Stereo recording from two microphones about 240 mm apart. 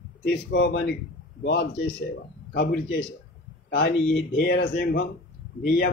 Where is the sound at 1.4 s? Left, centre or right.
Left.